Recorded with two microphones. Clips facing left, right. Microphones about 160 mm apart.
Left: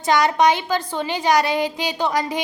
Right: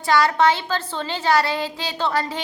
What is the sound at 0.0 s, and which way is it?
A woman's voice, 20° left (ahead or behind).